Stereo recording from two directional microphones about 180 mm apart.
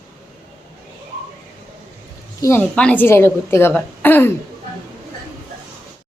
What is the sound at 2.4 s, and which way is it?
A woman's voice, 10° left (ahead or behind).